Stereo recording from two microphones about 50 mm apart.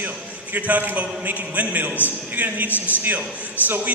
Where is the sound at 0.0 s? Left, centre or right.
Right.